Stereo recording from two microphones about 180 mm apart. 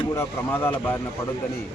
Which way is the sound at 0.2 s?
10° left (ahead or behind).